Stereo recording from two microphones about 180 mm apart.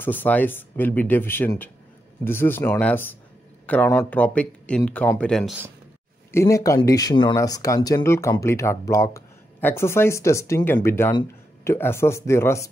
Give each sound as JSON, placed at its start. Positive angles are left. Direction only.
{"t": 0.0, "sound": "speech", "side_deg": 10}
{"t": 6.3, "sound": "speech", "side_deg": 15}